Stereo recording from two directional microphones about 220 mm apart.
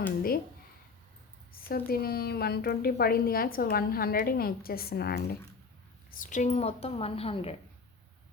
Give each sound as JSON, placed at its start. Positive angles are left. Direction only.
{"t": 1.6, "sound": "a woman's voice", "side_deg": 45}